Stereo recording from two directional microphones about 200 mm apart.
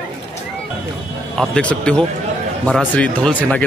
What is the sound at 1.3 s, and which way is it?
Speech, 5° left (ahead or behind).